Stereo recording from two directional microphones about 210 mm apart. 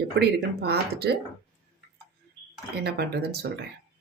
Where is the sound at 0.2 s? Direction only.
50° right (ahead or behind).